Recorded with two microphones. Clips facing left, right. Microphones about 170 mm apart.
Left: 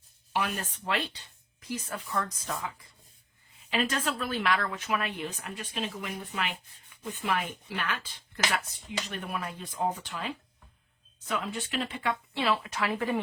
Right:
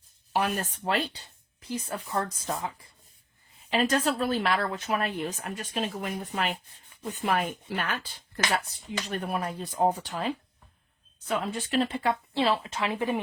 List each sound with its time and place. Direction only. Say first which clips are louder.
0.3 s speech: right 4 dB; 40° right (ahead or behind); by 13.1 s 20° right (ahead or behind)